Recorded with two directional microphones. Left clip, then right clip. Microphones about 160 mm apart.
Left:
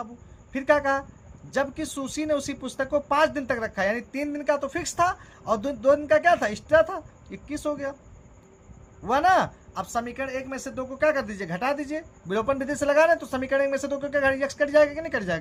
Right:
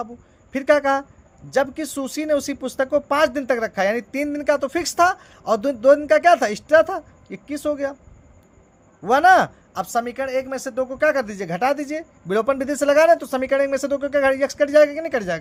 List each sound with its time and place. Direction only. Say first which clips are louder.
0.5 s speech: right 5 dB; 50° right (ahead or behind)
9.0 s speech: right 7 dB; 50° right (ahead or behind)